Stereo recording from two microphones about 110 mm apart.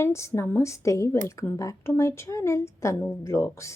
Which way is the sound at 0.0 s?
25° left (ahead or behind).